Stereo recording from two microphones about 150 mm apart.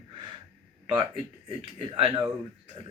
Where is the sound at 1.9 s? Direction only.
30° right (ahead or behind).